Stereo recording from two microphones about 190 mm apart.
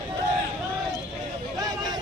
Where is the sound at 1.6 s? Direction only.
20° right (ahead or behind).